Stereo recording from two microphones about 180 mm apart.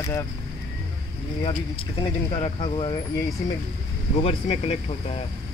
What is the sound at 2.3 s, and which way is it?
Speech, 30° left (ahead or behind).